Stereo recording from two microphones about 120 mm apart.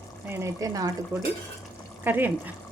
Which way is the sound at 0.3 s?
25° right (ahead or behind).